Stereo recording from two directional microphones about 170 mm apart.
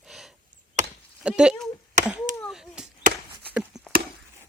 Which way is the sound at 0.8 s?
45° right (ahead or behind).